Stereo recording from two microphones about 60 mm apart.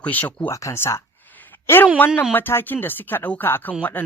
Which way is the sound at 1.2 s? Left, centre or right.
Left.